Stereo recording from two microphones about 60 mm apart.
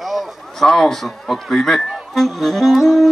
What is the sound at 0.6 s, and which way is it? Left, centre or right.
Speech, centre.